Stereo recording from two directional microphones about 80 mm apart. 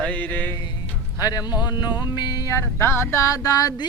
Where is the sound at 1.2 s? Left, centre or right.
Left.